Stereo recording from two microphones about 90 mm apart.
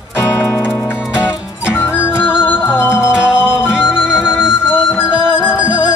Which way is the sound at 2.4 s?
25° left (ahead or behind).